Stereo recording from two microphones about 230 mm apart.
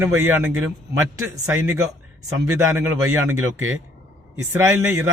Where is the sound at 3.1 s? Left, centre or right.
Right.